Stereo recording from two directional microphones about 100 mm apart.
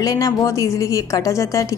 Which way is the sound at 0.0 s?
40° left (ahead or behind).